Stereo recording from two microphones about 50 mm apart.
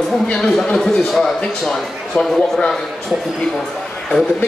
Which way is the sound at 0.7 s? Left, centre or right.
Centre.